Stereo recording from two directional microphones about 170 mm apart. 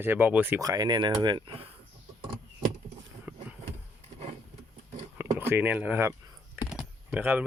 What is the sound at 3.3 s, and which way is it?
Vehicle, 10° right (ahead or behind).